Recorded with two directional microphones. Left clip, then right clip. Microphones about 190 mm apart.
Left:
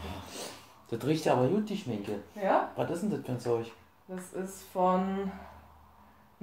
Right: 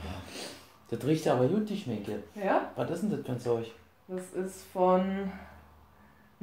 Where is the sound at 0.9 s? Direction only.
5° right (ahead or behind).